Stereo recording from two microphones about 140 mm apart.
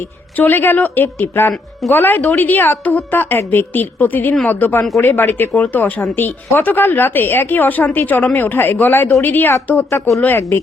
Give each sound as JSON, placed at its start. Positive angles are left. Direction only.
{"t": 0.3, "sound": "a woman's voice", "side_deg": 15}